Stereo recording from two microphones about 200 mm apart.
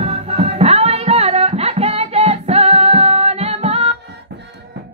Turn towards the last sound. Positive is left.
turn(degrees=-30)  # may be behind; listen again after turning